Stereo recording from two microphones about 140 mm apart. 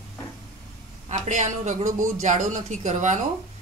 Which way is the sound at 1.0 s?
60° right (ahead or behind).